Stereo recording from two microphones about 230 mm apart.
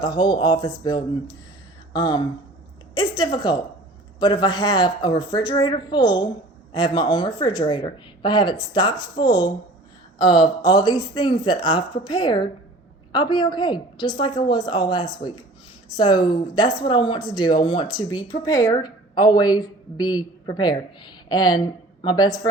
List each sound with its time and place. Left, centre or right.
0.0 s a woman's voice: centre